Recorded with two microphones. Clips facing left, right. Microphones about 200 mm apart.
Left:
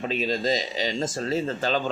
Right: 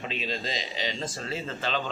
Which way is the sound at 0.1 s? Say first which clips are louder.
Left 10 dB; 45° left (ahead or behind).